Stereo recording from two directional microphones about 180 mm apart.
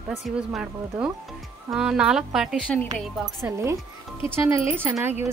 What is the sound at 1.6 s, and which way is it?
Speech, 5° right (ahead or behind).